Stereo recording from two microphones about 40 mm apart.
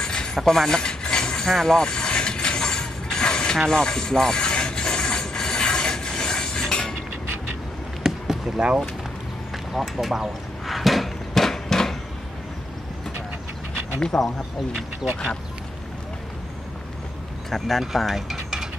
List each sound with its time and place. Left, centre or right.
0.0 s a sound: centre
0.4 s speech: centre
0.7 s speech: centre
1.0 s a sound: left
1.5 s speech: centre
1.8 s mechanisms: left
3.5 s rub: centre
8.0 s boat: centre
9.9 s a sound: centre
14.1 s speech: left
17.5 s speech: centre
18.3 s mechanisms: centre